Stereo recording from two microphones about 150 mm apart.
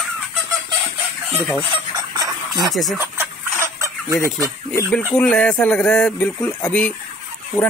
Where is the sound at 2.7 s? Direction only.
Centre (ahead or behind).